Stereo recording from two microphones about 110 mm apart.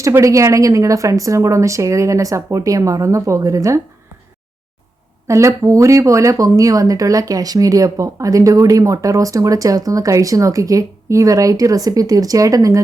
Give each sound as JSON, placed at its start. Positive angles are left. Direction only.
{"t": 0.0, "sound": "a woman's voice", "side_deg": -30}
{"t": 5.3, "sound": "speech", "side_deg": -30}